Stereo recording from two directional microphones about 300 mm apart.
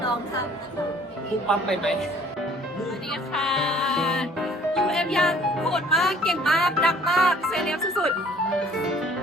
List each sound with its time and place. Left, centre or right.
1.5 s a woman's voice: centre
3.1 s music: centre
8.5 s a woman's voice: centre